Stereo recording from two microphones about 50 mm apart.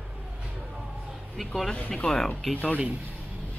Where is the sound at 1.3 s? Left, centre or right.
Centre.